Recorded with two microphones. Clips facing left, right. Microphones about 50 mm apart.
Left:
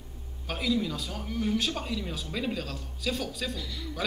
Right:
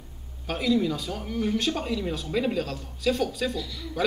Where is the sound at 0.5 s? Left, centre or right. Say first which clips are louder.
Right 5 dB; centre.